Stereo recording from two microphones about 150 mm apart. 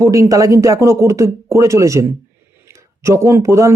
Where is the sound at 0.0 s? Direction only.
20° right (ahead or behind).